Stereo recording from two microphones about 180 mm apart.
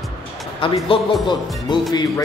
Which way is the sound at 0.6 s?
30° left (ahead or behind).